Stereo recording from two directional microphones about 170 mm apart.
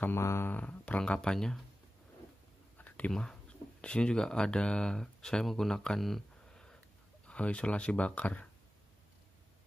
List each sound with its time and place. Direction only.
0.0 s speech: 15° left (ahead or behind)
2.8 s speech: 5° left (ahead or behind)